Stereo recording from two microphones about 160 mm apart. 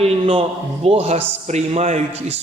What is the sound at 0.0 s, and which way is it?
A man's voice, 40° right (ahead or behind).